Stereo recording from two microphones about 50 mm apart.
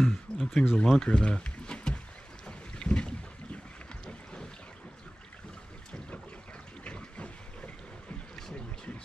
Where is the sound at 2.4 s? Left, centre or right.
Centre.